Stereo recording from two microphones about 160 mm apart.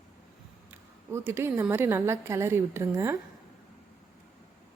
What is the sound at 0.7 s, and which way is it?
A woman's voice, 15° right (ahead or behind).